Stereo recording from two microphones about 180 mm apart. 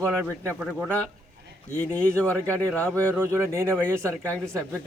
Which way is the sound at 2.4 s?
15° right (ahead or behind).